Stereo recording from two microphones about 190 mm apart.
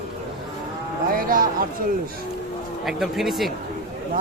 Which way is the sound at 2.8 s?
Centre (ahead or behind).